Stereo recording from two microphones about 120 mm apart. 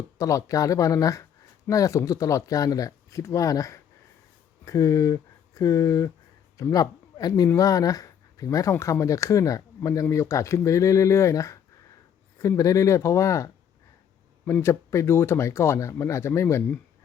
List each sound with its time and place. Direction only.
0.2 s speech: 25° left (ahead or behind)